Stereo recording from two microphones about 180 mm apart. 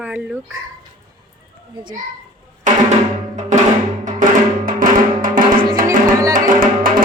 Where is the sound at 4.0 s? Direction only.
45° right (ahead or behind).